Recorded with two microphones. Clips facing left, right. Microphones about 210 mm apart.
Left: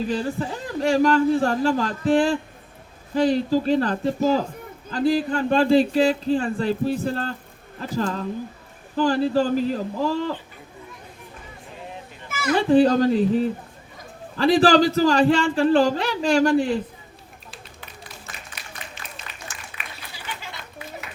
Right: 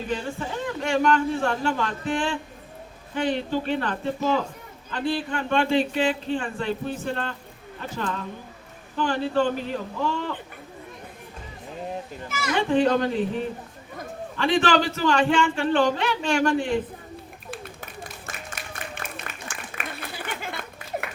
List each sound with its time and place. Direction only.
0.1 s speech: 35° left (ahead or behind)
12.5 s speech: 35° left (ahead or behind)
17.5 s run: 50° right (ahead or behind)
18.5 s a sound: 55° right (ahead or behind)
19.7 s applause: 50° right (ahead or behind)